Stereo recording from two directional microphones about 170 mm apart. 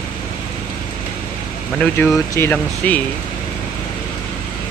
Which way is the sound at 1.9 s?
15° left (ahead or behind).